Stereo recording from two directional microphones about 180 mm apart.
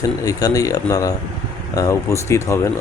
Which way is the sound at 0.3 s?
20° left (ahead or behind).